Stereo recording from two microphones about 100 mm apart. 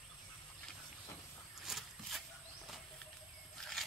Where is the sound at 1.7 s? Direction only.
5° right (ahead or behind).